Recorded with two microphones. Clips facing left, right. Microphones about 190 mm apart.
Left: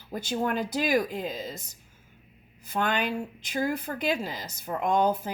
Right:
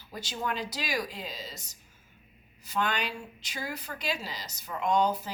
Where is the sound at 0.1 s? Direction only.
50° left (ahead or behind).